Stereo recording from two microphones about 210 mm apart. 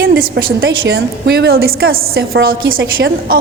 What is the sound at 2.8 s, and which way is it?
Speech, 60° right (ahead or behind).